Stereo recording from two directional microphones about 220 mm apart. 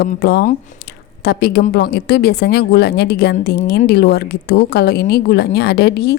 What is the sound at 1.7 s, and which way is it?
A woman's voice, 45° left (ahead or behind).